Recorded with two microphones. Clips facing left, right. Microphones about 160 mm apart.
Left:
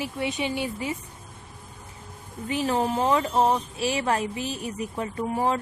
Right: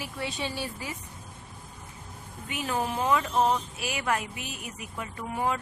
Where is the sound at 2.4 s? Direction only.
30° left (ahead or behind).